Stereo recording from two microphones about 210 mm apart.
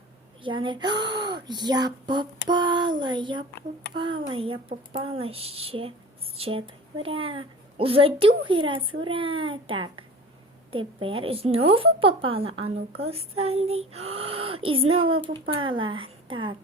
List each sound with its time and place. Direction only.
0.4 s a woman's voice: 25° right (ahead or behind)